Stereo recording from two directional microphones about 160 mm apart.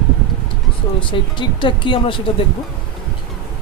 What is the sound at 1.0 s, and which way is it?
Speech, 30° left (ahead or behind).